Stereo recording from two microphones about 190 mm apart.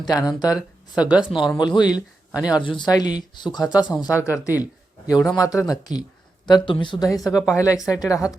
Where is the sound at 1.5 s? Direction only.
20° left (ahead or behind).